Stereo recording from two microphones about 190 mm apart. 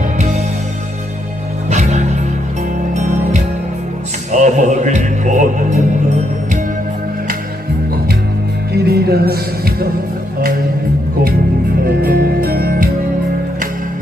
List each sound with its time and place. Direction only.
1.7 s music: 40° right (ahead or behind)
8.7 s music: 55° right (ahead or behind)
12.0 s music: 50° right (ahead or behind)